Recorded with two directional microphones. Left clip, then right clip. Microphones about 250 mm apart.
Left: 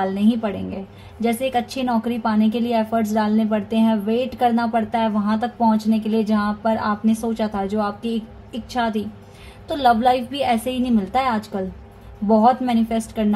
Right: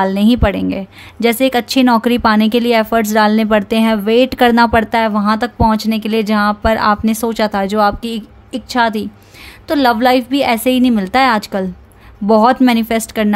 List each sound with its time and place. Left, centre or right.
0.0 s a woman's voice: right